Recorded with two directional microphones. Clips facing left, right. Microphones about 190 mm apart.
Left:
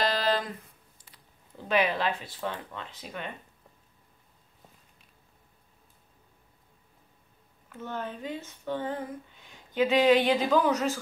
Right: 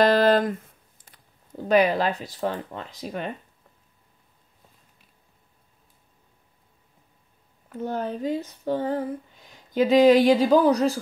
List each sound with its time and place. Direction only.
0.0 s a sound: 55° right (ahead or behind)
1.0 s speech: 45° right (ahead or behind)
7.7 s speech: 35° right (ahead or behind)